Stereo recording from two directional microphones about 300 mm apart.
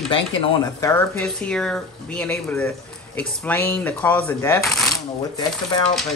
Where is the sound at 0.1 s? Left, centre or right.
Centre.